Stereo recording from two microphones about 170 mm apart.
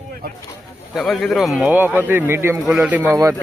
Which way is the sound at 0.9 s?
Centre (ahead or behind).